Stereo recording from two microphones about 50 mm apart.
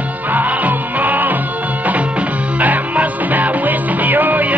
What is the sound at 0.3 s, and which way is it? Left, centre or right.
Music, right.